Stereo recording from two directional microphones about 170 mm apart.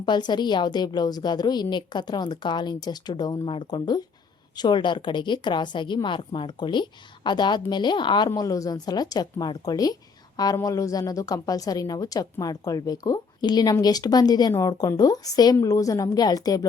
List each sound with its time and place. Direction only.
0.0 s speech: 25° left (ahead or behind)